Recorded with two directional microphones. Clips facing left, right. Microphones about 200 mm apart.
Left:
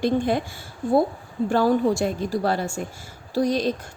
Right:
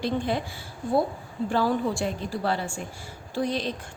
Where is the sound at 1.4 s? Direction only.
45° left (ahead or behind).